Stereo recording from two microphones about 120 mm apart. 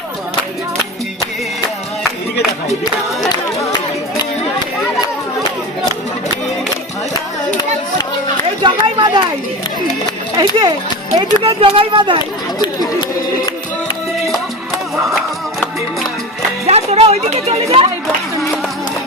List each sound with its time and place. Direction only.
3.2 s a sound: 35° left (ahead or behind)
8.6 s speech: 40° right (ahead or behind)
10.3 s speech: 35° right (ahead or behind)
11.4 s speech: 50° right (ahead or behind)
12.5 s chatter: 35° left (ahead or behind)
14.2 s music: centre (ahead or behind)
16.6 s speech: 60° right (ahead or behind)